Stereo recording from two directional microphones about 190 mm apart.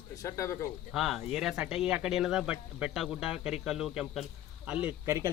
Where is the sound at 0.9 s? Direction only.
Centre (ahead or behind).